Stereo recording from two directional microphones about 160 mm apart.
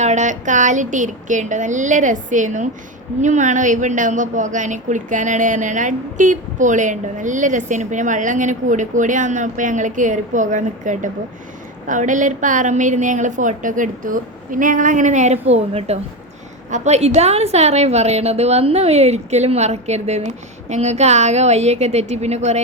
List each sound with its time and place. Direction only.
0.0 s a woman's voice: 50° right (ahead or behind)